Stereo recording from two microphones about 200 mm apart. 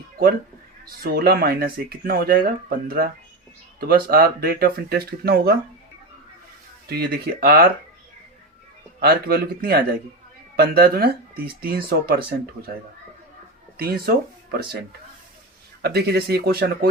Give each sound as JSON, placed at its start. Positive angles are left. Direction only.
{"t": 1.0, "sound": "speech", "side_deg": -50}
{"t": 6.8, "sound": "speech", "side_deg": -50}
{"t": 9.0, "sound": "speech", "side_deg": -50}
{"t": 13.7, "sound": "speech", "side_deg": -50}